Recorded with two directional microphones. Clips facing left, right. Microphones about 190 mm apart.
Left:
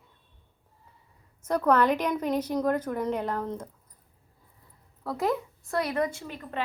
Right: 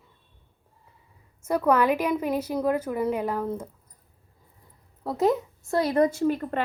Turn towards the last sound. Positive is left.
turn(degrees=-50)  # may be behind; listen again after turning